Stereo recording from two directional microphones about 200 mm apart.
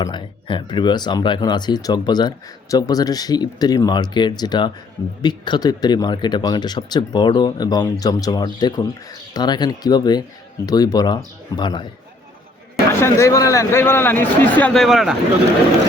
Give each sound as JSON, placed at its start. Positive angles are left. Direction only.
{"t": 0.0, "sound": "speech", "side_deg": 25}
{"t": 12.9, "sound": "a man's voice", "side_deg": 15}